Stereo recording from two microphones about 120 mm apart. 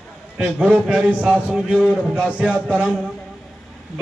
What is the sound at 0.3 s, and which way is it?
Speech, 5° right (ahead or behind).